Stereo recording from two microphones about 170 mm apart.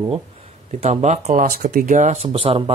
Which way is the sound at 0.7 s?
40° right (ahead or behind).